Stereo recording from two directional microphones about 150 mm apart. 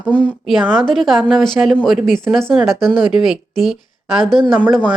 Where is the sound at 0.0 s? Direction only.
10° left (ahead or behind).